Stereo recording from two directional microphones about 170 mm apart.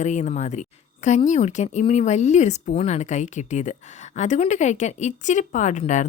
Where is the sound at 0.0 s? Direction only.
45° left (ahead or behind).